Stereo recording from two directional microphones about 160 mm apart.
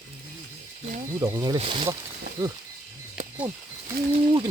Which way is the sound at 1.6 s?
40° right (ahead or behind).